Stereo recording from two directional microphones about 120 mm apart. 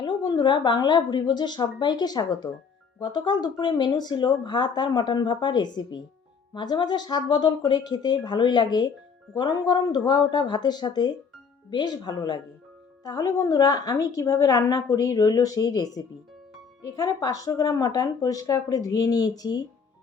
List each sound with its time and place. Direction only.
0.0 s a woman's voice: 35° left (ahead or behind)